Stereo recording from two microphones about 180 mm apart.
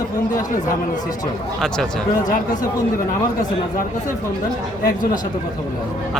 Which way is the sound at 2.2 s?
50° left (ahead or behind).